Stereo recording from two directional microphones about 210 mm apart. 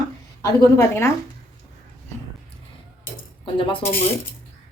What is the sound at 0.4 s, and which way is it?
Speech, 15° left (ahead or behind).